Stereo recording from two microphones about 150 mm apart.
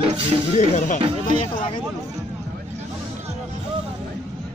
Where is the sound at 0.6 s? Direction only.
60° left (ahead or behind).